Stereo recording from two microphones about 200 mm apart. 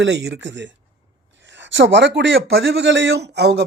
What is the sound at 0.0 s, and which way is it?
Speech, 55° right (ahead or behind).